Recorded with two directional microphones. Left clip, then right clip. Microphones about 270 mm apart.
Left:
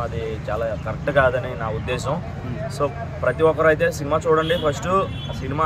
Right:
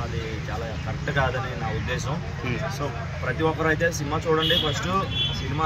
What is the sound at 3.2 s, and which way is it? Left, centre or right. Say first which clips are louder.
Speech: left 8 dB; centre.